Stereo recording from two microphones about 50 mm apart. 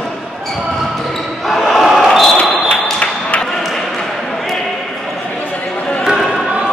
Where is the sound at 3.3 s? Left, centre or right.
Left.